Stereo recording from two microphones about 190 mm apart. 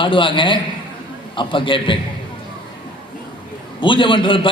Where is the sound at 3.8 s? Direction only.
25° left (ahead or behind).